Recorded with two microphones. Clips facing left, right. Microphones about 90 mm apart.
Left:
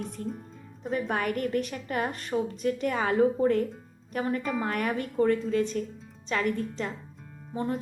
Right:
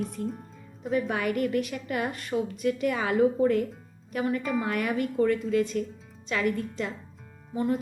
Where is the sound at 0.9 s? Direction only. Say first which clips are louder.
Right 1 dB; 40° left (ahead or behind).